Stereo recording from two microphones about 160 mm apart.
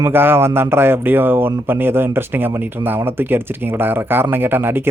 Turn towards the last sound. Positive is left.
turn(degrees=-15)  # may be behind; listen again after turning